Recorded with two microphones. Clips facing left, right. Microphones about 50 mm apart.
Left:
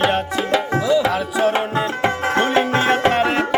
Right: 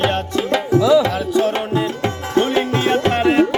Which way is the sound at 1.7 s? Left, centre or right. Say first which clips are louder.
Even; left.